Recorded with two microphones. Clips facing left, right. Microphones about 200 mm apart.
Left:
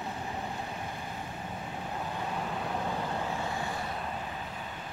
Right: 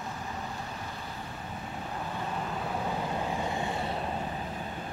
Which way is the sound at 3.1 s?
20° right (ahead or behind).